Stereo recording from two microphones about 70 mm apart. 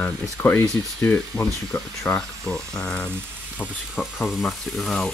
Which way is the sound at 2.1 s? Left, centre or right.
Centre.